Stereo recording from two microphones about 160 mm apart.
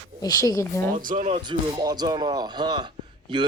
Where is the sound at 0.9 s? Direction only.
60° right (ahead or behind).